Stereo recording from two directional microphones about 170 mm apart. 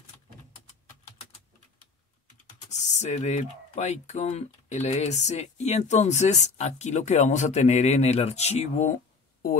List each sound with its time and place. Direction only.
2.7 s speech: 45° left (ahead or behind)